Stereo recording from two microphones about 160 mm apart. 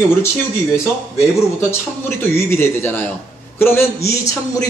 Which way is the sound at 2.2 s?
15° left (ahead or behind).